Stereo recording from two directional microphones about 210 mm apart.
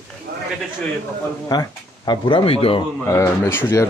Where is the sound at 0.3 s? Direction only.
45° right (ahead or behind).